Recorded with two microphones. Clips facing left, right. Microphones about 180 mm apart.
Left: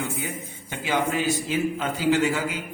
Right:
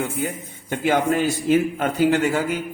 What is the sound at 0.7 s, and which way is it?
A man's voice, 50° right (ahead or behind).